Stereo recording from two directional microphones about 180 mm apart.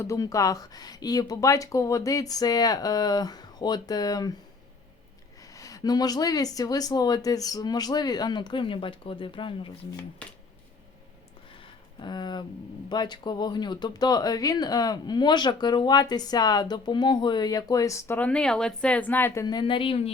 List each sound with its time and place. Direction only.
0.0 s speech: 15° left (ahead or behind)
5.4 s speech: 20° left (ahead or behind)
11.5 s a sound: 30° left (ahead or behind)
12.9 s speech: 25° left (ahead or behind)